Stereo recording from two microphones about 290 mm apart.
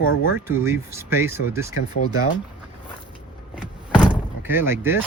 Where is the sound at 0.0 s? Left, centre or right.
Left.